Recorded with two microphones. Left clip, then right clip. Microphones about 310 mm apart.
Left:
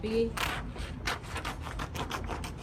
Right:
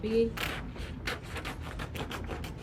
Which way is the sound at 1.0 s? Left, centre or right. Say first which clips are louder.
Left 2 dB; centre.